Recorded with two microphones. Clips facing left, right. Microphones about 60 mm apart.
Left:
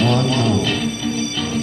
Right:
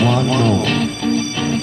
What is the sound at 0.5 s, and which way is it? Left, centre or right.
Music, right.